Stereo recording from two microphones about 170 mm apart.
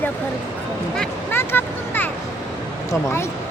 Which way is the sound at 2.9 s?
15° left (ahead or behind).